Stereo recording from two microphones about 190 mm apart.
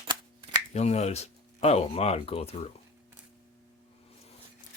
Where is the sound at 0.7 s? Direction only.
35° left (ahead or behind).